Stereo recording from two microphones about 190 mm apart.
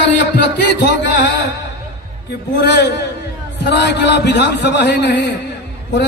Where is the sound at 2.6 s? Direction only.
60° left (ahead or behind).